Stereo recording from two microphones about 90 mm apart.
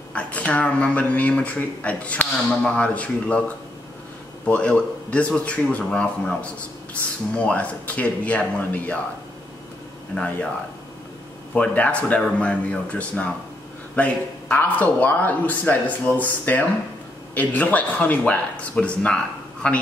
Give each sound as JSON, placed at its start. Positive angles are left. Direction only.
{"t": 0.1, "sound": "speech", "side_deg": 15}
{"t": 4.5, "sound": "speech", "side_deg": 15}
{"t": 10.1, "sound": "speech", "side_deg": 10}
{"t": 11.5, "sound": "speech", "side_deg": 15}